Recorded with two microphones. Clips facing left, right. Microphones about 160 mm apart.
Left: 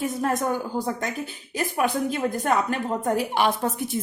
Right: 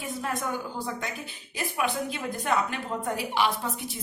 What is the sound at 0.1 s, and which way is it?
A woman's voice, 45° left (ahead or behind).